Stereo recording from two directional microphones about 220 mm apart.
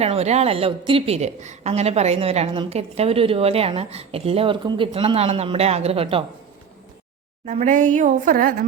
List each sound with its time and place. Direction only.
0.0 s a woman's voice: 30° right (ahead or behind)
7.4 s a woman's voice: 35° right (ahead or behind)